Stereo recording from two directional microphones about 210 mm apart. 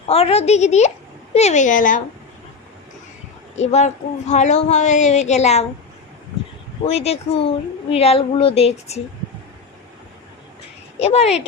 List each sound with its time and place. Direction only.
0.1 s speech: 30° left (ahead or behind)
3.5 s speech: 35° left (ahead or behind)
6.8 s speech: 30° left (ahead or behind)
11.0 s speech: 30° left (ahead or behind)